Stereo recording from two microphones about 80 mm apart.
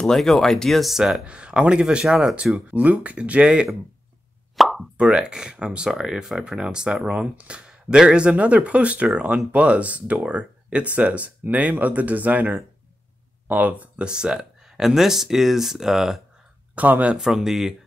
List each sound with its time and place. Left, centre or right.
0.0 s speech: centre
4.6 s plop: centre
4.9 s speech: centre
16.7 s speech: centre
17.2 s speech: centre